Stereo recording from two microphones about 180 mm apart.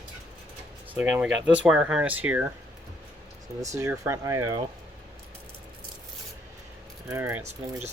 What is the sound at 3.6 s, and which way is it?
Speech, 15° right (ahead or behind).